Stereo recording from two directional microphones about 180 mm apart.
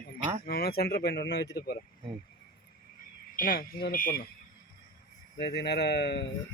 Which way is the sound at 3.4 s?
55° left (ahead or behind).